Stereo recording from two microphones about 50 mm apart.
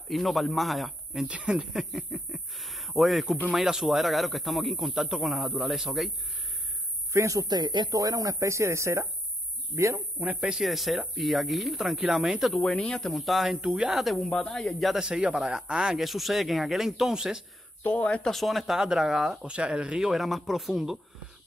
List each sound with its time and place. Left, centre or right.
0.1 s speech: centre
1.3 s speech: right
1.7 s speech: centre
7.1 s speech: right
8.2 s speech: right
10.6 s speech: centre
12.6 s speech: centre
15.0 s speech: centre
18.2 s speech: centre
19.4 s speech: right
20.1 s speech: centre